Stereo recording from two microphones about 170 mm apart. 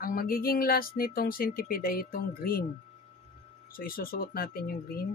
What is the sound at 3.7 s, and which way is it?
Speech, 60° left (ahead or behind).